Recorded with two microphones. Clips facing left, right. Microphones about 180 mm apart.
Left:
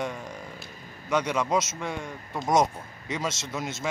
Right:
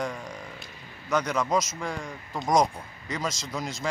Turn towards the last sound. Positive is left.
turn(degrees=5)  # may be behind; listen again after turning